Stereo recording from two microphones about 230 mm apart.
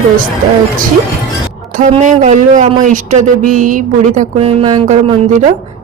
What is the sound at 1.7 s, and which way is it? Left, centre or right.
Speech, right.